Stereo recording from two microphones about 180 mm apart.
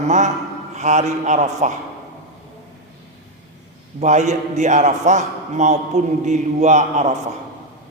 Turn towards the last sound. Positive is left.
turn(degrees=-40)  # may be behind; listen again after turning